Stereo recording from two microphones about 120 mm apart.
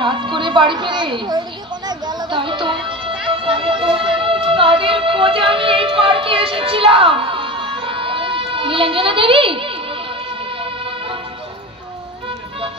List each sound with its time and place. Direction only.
0.0 s a woman's voice: 45° right (ahead or behind)
1.9 s music: 35° right (ahead or behind)